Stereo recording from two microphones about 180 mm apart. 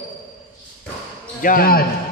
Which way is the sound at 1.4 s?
50° left (ahead or behind).